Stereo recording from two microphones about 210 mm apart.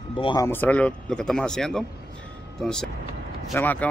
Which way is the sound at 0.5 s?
10° left (ahead or behind).